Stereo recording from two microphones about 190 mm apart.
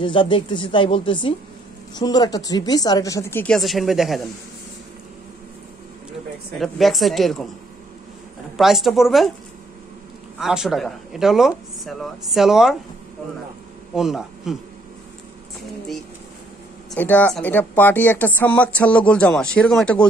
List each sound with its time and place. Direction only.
0.0 s a woman's voice: 25° left (ahead or behind); by 4.3 s centre (ahead or behind)
6.6 s speech: centre (ahead or behind)
8.5 s speech: centre (ahead or behind)
10.4 s speech: centre (ahead or behind)
13.9 s speech: centre (ahead or behind)
16.9 s a woman's voice: 10° left (ahead or behind)